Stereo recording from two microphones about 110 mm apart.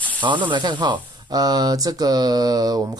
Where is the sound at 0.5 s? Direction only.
45° right (ahead or behind).